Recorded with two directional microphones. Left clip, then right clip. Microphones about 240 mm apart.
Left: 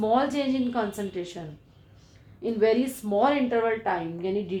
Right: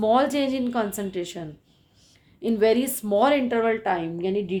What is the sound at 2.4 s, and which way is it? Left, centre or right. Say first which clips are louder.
A woman's voice: right 2 dB; right.